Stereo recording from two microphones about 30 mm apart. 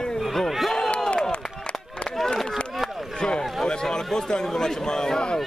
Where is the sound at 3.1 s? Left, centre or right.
Left.